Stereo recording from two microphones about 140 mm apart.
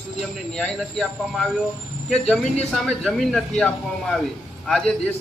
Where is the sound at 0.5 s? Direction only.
5° left (ahead or behind).